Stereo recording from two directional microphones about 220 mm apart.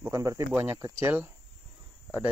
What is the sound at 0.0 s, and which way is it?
Speech, 15° right (ahead or behind).